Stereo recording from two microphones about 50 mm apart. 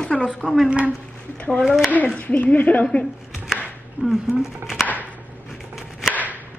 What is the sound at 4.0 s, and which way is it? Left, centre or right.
Speech, right.